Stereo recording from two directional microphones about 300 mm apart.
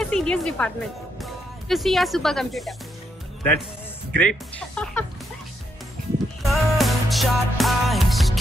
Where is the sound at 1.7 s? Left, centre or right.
Centre.